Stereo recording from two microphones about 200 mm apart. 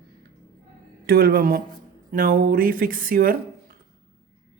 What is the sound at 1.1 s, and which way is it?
Speech, 50° right (ahead or behind).